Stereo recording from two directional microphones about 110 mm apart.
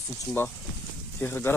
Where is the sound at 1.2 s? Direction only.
20° left (ahead or behind).